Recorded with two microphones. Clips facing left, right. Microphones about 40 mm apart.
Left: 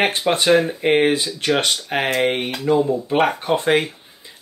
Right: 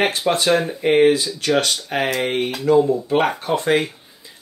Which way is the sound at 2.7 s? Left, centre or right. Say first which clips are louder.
Right 2 dB; centre.